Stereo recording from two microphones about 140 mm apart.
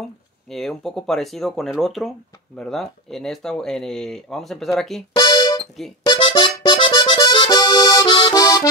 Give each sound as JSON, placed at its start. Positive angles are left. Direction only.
{"t": 0.5, "sound": "speech", "side_deg": 0}
{"t": 5.1, "sound": "music", "side_deg": 30}
{"t": 6.0, "sound": "accordion", "side_deg": 35}